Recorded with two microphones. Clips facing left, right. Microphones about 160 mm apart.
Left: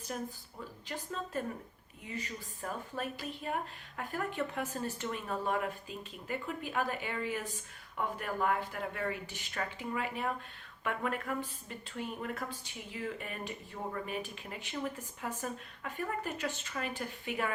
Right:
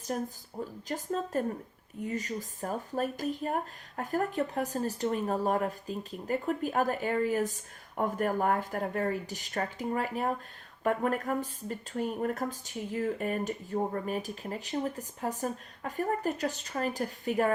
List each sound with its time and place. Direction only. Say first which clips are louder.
0.1 s speech: right 6 dB; 45° right (ahead or behind)